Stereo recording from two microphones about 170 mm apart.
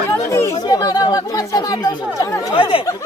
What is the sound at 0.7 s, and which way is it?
Speech, 25° left (ahead or behind).